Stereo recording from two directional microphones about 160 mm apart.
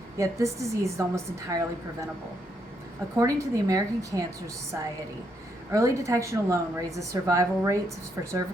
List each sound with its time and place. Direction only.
0.2 s a woman's voice: 20° right (ahead or behind)
3.2 s a woman's voice: 20° right (ahead or behind)
5.7 s a woman's voice: 20° right (ahead or behind)